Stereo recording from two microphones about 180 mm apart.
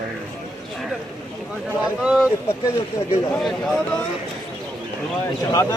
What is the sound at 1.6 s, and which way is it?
Speech, 5° right (ahead or behind).